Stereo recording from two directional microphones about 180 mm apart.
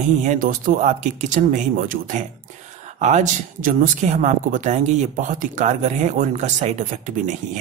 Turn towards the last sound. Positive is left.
turn(degrees=-45)  # may be behind; listen again after turning